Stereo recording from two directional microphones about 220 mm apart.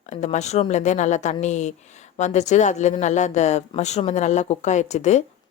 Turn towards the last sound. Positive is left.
turn(degrees=30)  # may be behind; listen again after turning